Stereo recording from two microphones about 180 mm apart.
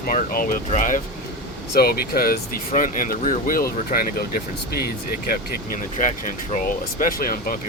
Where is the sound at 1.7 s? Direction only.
60° left (ahead or behind).